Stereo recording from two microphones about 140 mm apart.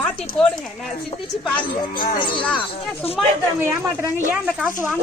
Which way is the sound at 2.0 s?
35° left (ahead or behind).